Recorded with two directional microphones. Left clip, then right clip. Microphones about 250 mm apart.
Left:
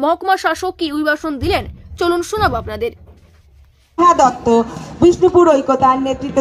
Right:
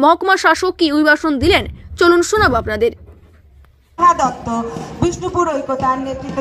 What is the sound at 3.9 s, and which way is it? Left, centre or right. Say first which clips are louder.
A man's voice: left 2 dB; left.